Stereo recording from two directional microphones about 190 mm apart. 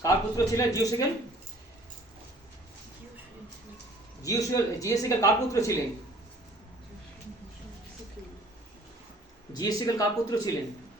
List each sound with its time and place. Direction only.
0.0 s speech: 15° left (ahead or behind)
4.2 s speech: 15° left (ahead or behind)
9.5 s speech: 20° left (ahead or behind)